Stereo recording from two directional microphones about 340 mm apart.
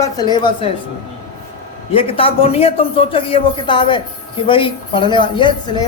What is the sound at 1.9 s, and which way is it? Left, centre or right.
A man's voice, centre.